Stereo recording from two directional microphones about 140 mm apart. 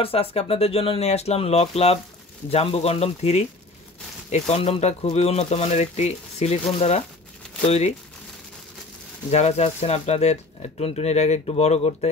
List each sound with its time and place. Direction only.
0.0 s speech: 45° left (ahead or behind)
9.3 s speech: 50° left (ahead or behind)